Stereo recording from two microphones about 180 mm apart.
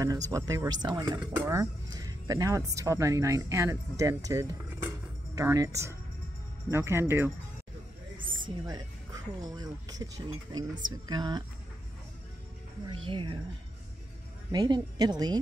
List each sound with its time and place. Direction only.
0.0 s speech: 20° right (ahead or behind)
8.3 s speech: 25° right (ahead or behind)
12.8 s speech: 25° right (ahead or behind)
14.5 s speech: 20° right (ahead or behind)